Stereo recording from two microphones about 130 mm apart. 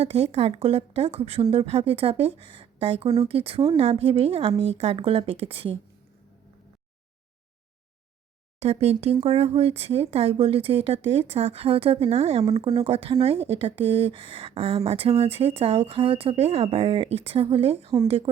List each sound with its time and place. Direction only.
0.0 s speech: 50° right (ahead or behind)
8.5 s speech: 55° right (ahead or behind)